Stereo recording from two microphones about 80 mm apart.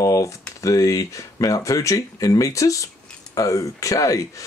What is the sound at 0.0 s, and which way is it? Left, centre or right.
Speech, left.